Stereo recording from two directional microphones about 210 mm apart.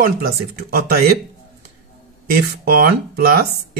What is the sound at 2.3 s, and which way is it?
Speech, 45° right (ahead or behind).